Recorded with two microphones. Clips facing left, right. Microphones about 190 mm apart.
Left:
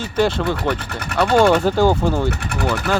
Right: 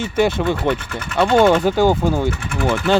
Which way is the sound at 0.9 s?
35° left (ahead or behind).